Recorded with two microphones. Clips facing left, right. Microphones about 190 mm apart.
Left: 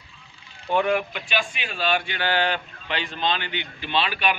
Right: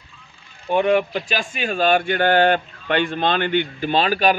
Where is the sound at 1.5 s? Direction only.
45° right (ahead or behind).